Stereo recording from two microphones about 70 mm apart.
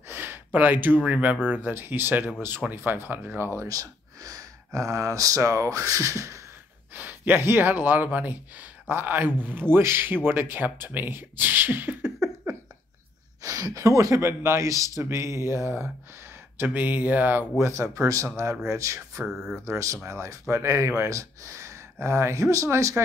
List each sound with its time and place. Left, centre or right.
0.1 s speech: right
3.6 s speech: right
6.9 s speech: right
13.4 s speech: right
16.5 s speech: right
17.6 s speech: right
17.9 s speech: right
19.2 s speech: centre
19.5 s speech: right